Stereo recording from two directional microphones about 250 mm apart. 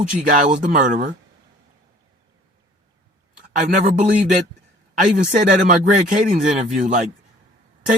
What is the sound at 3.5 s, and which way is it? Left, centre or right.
A man's voice, right.